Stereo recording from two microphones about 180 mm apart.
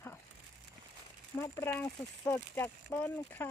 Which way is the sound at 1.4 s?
15° left (ahead or behind).